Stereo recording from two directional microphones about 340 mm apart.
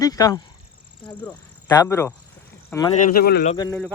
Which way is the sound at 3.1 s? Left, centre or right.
Left.